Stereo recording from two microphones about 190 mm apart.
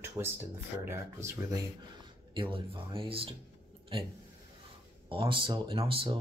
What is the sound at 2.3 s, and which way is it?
A man's voice, 25° right (ahead or behind).